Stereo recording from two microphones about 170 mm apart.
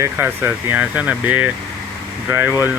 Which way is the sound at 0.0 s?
10° right (ahead or behind).